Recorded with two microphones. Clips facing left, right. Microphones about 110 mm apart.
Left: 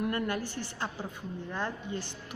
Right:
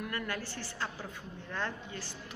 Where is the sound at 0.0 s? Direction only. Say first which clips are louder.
Left 6 dB; 20° left (ahead or behind).